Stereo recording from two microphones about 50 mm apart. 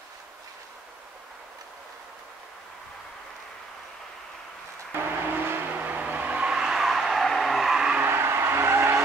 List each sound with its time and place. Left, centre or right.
4.9 s vehicle: right
5.7 s vehicle: right
6.5 s vehicle: centre
8.0 s vehicle: right